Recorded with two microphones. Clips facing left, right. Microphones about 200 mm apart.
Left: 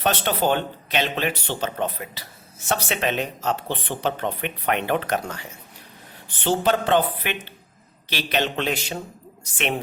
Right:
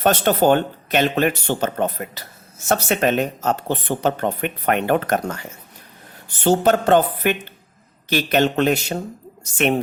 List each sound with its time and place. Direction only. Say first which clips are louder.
0.0 s speech: right 6 dB; 45° right (ahead or behind)